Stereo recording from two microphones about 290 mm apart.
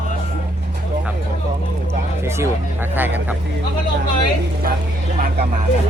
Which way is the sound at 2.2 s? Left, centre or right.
Centre.